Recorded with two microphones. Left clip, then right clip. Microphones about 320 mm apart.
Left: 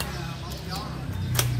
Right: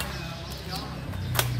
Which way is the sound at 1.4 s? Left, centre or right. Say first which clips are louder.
Even; centre.